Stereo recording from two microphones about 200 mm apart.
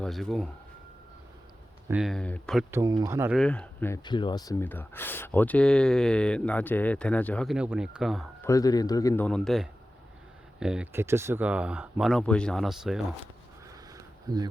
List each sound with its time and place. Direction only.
0.0 s speech: centre (ahead or behind)
1.9 s speech: centre (ahead or behind)
2.7 s speech: 20° right (ahead or behind)
3.3 s speech: 5° left (ahead or behind)
8.4 s speech: 15° left (ahead or behind)
9.2 s speech: centre (ahead or behind)
13.9 s a sound: 20° right (ahead or behind)